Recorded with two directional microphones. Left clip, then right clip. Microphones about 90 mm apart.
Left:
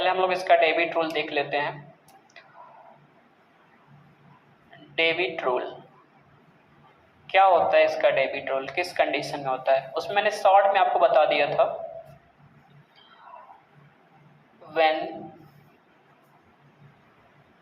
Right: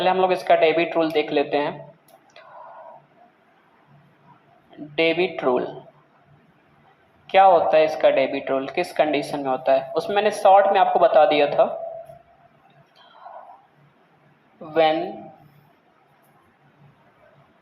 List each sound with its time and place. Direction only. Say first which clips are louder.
0.0 s speech: right 4 dB; 25° right (ahead or behind)
4.9 s speech: right 3 dB; 25° right (ahead or behind)
7.3 s speech: right 4 dB; 25° right (ahead or behind)
14.7 s a man's voice: right 3 dB; 25° right (ahead or behind)